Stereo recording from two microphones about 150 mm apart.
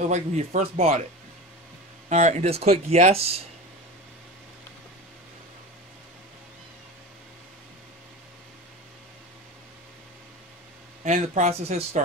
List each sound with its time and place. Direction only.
0.0 s speech: 50° right (ahead or behind)
2.0 s speech: 50° right (ahead or behind)
11.1 s speech: 50° right (ahead or behind)